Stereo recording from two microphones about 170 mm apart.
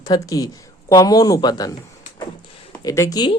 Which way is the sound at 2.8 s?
20° left (ahead or behind).